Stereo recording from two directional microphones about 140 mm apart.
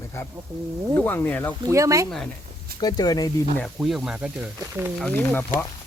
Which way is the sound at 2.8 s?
30° left (ahead or behind).